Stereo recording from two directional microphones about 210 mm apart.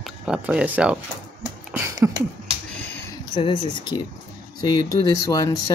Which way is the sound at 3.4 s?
25° left (ahead or behind).